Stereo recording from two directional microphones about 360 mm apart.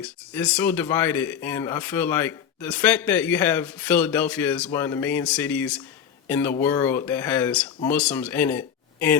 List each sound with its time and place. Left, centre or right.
0.0 s speech: centre